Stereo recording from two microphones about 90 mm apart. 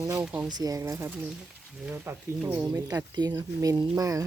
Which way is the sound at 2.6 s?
45° right (ahead or behind).